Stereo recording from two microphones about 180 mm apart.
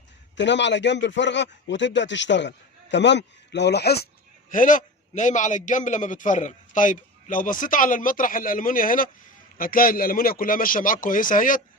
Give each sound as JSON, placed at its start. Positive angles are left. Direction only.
{"t": 0.3, "sound": "a man's voice", "side_deg": 80}